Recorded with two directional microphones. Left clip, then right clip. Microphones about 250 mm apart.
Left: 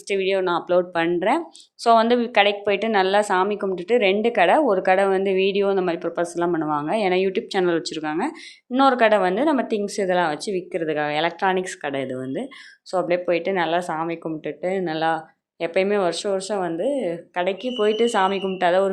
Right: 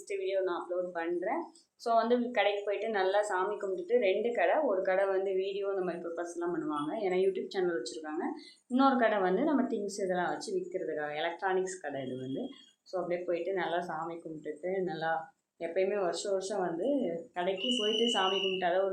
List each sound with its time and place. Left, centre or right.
0.1 s a woman's voice: left